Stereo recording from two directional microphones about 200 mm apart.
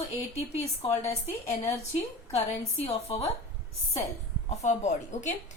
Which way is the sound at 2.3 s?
30° left (ahead or behind).